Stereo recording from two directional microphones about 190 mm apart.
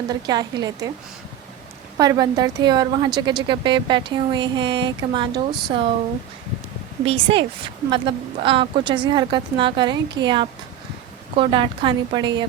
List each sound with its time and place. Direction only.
0.1 s speech: 20° right (ahead or behind)
2.0 s speech: 20° right (ahead or behind)
7.0 s speech: 30° right (ahead or behind)